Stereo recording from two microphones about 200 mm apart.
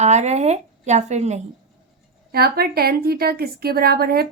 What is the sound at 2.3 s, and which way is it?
Speech, 50° right (ahead or behind).